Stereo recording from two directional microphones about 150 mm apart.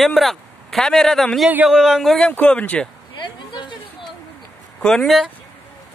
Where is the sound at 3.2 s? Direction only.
30° left (ahead or behind).